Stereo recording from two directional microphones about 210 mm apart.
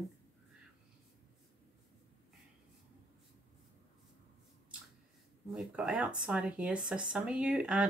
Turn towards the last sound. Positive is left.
turn(degrees=-5)  # may be behind; listen again after turning